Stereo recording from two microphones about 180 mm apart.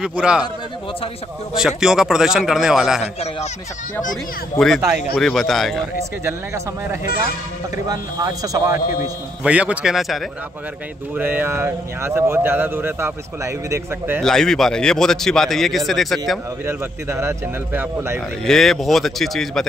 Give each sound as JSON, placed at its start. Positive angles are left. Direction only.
{"t": 0.0, "sound": "speech", "side_deg": -5}
{"t": 1.5, "sound": "a man's voice", "side_deg": -5}
{"t": 3.0, "sound": "speech", "side_deg": 35}
{"t": 4.6, "sound": "a man's voice", "side_deg": 0}
{"t": 6.2, "sound": "a man's voice", "side_deg": -15}
{"t": 9.4, "sound": "a man's voice", "side_deg": -5}
{"t": 11.1, "sound": "speech", "side_deg": -10}
{"t": 14.2, "sound": "a man's voice", "side_deg": 0}
{"t": 16.6, "sound": "speech", "side_deg": -15}
{"t": 18.4, "sound": "a man's voice", "side_deg": 0}